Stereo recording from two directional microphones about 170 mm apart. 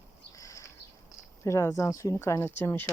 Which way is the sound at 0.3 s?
20° left (ahead or behind).